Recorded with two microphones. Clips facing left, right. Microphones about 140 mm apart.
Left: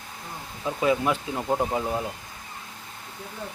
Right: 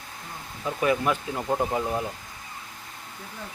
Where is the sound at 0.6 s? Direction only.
20° left (ahead or behind).